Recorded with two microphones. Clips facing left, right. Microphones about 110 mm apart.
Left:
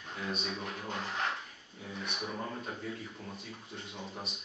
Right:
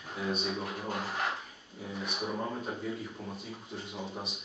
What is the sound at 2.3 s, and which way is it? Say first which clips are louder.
Speech: right 6 dB; 15° right (ahead or behind).